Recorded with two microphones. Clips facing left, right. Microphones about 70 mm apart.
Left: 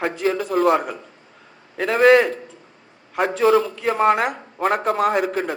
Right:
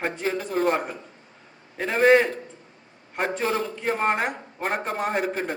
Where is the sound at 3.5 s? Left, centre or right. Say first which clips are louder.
Left 10 dB; right.